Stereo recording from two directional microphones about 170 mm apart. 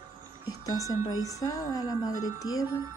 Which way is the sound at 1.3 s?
20° left (ahead or behind).